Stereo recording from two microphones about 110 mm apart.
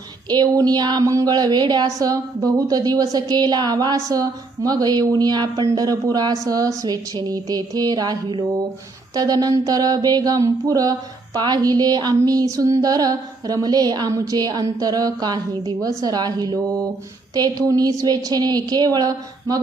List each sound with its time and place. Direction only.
0.3 s speech: 40° right (ahead or behind)